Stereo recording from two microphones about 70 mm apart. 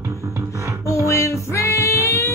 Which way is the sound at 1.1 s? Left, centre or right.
Left.